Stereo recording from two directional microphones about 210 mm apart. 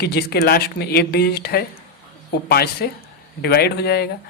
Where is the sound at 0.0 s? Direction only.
50° left (ahead or behind).